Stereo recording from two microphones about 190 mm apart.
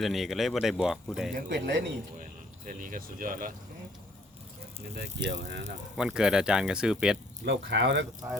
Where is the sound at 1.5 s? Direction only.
65° right (ahead or behind).